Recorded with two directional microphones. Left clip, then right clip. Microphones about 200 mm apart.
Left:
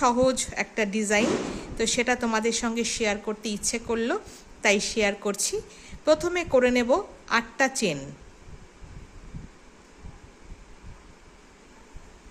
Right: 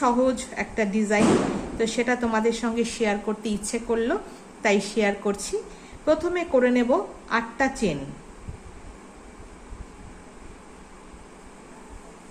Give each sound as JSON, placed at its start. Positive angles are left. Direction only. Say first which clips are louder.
{"t": 0.0, "sound": "speech", "louder": "even", "side_deg": 40}